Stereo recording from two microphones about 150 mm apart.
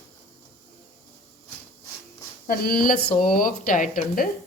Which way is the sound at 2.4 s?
80° left.